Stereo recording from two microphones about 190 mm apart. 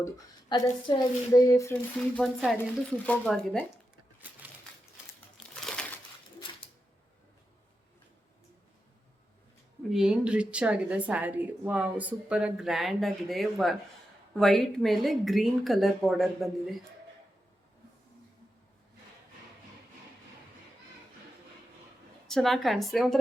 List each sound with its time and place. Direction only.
0.0 s speech: 15° left (ahead or behind)
2.1 s a woman's voice: centre (ahead or behind)
5.7 s a sound: centre (ahead or behind)
6.4 s a sound: 25° left (ahead or behind)
9.9 s a woman's voice: 5° right (ahead or behind)
22.3 s a woman's voice: centre (ahead or behind)